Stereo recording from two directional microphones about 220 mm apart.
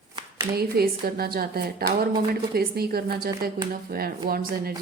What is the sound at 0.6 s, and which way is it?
Speech, 45° right (ahead or behind).